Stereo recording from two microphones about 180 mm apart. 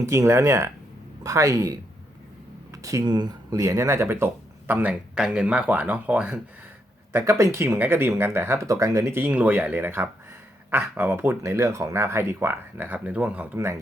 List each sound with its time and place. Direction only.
0.0 s speech: 15° right (ahead or behind)